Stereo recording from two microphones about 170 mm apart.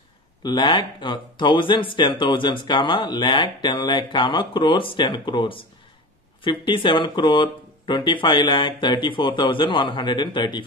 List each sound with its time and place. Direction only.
0.4 s speech: 25° left (ahead or behind)